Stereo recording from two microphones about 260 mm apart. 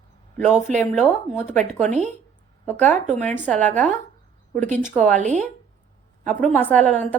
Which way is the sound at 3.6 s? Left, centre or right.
Right.